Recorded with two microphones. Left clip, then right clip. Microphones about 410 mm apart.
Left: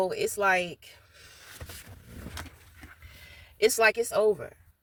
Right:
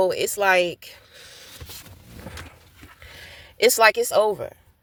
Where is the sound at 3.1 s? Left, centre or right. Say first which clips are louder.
Right 8 dB; right.